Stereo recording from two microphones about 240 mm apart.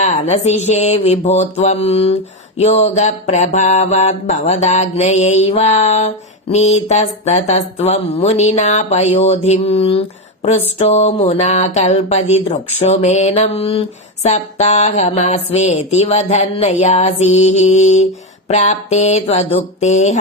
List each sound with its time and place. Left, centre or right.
0.0 s mantra: left